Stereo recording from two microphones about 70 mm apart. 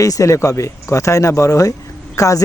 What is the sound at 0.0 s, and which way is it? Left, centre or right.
Speech, left.